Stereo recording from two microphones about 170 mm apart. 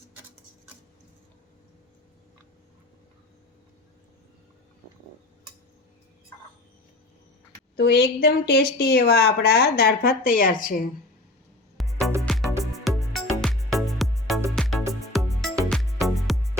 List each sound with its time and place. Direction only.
7.8 s a woman's voice: 70° left (ahead or behind); by 10.8 s 55° left (ahead or behind)
11.8 s music: centre (ahead or behind)